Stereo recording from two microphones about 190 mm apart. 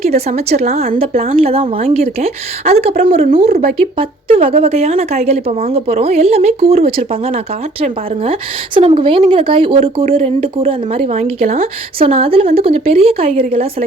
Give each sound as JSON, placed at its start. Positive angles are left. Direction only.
{"t": 0.0, "sound": "a woman's voice", "side_deg": -35}
{"t": 0.7, "sound": "speech", "side_deg": -50}
{"t": 1.4, "sound": "a woman's voice", "side_deg": -30}
{"t": 3.4, "sound": "speech", "side_deg": -55}
{"t": 3.8, "sound": "a woman's voice", "side_deg": -30}
{"t": 11.9, "sound": "a woman's voice", "side_deg": -30}